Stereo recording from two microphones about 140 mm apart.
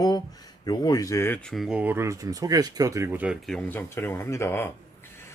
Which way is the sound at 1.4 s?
Centre (ahead or behind).